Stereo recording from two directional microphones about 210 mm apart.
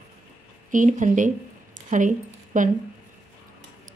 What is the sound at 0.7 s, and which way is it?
A woman's voice, 35° right (ahead or behind).